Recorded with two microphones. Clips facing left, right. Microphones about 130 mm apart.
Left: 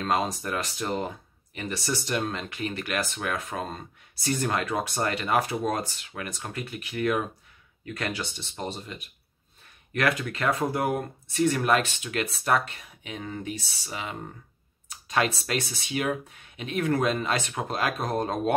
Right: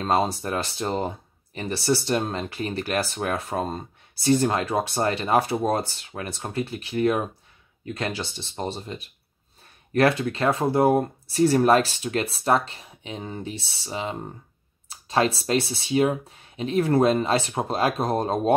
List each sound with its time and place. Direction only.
0.0 s speech: 30° right (ahead or behind)